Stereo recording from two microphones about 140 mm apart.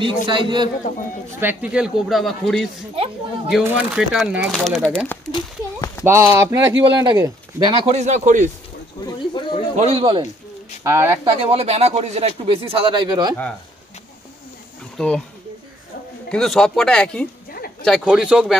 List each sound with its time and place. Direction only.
0.3 s speech: 35° right (ahead or behind)
1.4 s speech: 10° right (ahead or behind)
3.7 s speech: 5° right (ahead or behind)
5.3 s a sound: 25° left (ahead or behind)
6.0 s speech: 15° right (ahead or behind)
7.7 s speech: 45° right (ahead or behind)
9.0 s chatter: 35° left (ahead or behind)
9.8 s speech: 45° right (ahead or behind)
10.8 s speech: 20° right (ahead or behind)
11.2 s speech: 40° right (ahead or behind)
15.0 s speech: 5° left (ahead or behind)
16.3 s speech: 5° left (ahead or behind)